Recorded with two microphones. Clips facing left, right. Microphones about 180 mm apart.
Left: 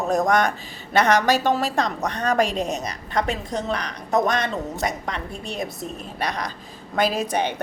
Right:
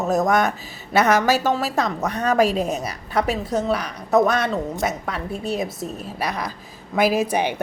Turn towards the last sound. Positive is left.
turn(degrees=-10)  # may be behind; listen again after turning